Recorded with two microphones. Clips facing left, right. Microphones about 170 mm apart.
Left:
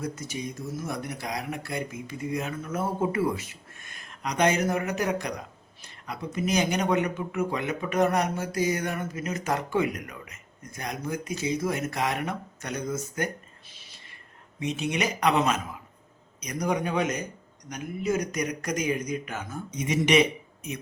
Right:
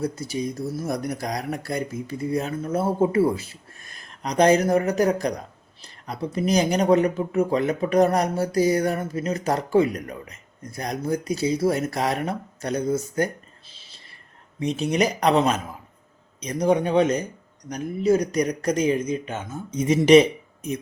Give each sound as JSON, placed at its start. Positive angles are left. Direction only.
{"t": 0.0, "sound": "speech", "side_deg": -35}